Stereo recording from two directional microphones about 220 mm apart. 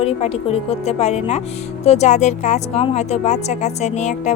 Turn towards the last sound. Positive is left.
turn(degrees=30)  # may be behind; listen again after turning